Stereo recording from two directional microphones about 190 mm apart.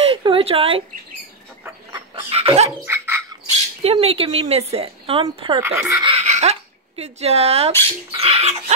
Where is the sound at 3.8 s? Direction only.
30° right (ahead or behind).